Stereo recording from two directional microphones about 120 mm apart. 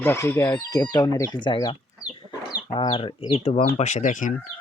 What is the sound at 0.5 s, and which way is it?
Speech, 30° left (ahead or behind).